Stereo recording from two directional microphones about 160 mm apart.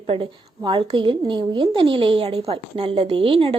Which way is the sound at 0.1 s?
30° right (ahead or behind).